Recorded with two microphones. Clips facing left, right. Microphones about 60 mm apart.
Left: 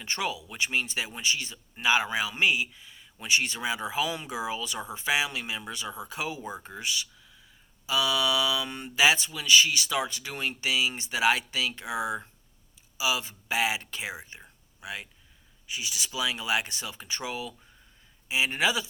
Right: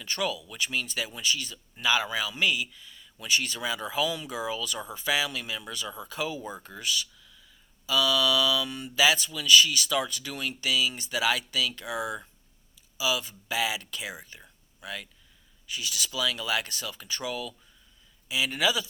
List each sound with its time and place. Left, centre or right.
0.0 s speech: left
14.3 s a sound: centre
15.6 s speech: centre